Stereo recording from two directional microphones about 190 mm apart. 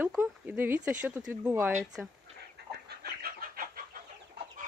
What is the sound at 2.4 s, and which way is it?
Chicken, 55° right (ahead or behind).